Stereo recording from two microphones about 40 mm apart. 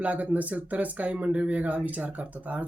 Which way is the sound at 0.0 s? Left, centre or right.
Right.